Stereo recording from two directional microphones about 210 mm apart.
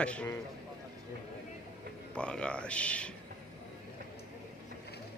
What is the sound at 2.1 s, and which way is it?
Speech, 5° left (ahead or behind).